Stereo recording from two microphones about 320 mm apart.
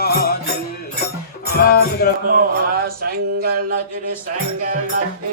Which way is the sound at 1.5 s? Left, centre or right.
Left.